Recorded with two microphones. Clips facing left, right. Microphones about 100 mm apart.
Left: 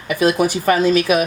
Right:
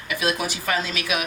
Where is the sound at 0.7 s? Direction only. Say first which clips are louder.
Left 11 dB; 40° left (ahead or behind).